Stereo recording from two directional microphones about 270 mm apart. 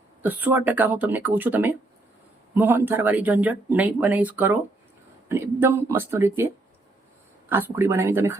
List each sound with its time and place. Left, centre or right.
0.2 s speech: centre
7.5 s speech: centre